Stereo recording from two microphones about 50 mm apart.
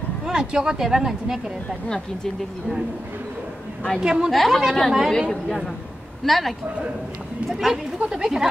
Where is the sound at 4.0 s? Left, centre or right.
Centre.